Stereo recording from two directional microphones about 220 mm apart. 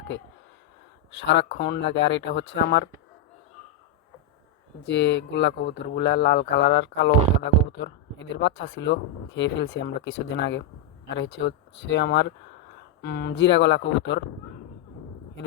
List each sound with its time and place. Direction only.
1.2 s speech: 55° left (ahead or behind)
4.9 s speech: 50° left (ahead or behind)